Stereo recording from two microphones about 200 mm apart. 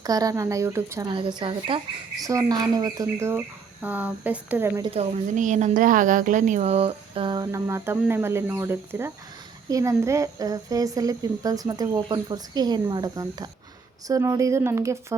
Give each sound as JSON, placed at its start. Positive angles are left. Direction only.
{"t": 0.0, "sound": "speech", "side_deg": -15}
{"t": 1.1, "sound": "speech", "side_deg": -25}
{"t": 4.8, "sound": "speech", "side_deg": -35}